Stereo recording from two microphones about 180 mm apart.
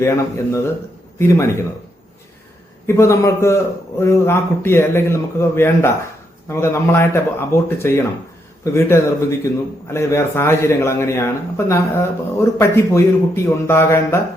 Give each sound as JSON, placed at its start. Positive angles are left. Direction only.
{"t": 0.0, "sound": "speech", "side_deg": 15}
{"t": 2.8, "sound": "speech", "side_deg": 15}